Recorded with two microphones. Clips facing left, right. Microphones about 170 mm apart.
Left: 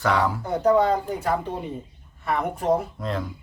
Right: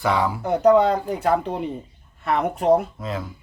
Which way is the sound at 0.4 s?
70° right (ahead or behind).